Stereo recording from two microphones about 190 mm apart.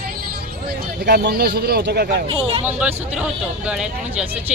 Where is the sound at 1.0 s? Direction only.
60° right (ahead or behind).